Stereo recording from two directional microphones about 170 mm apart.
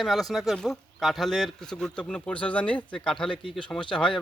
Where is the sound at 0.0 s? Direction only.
Centre (ahead or behind).